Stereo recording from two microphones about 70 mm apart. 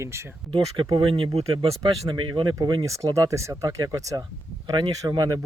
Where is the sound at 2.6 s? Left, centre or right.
Right.